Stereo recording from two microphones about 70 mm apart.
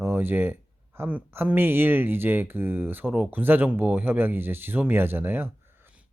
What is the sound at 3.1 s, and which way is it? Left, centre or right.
Speech, centre.